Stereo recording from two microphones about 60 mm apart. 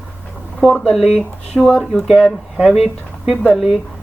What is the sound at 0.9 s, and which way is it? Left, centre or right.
Speech, centre.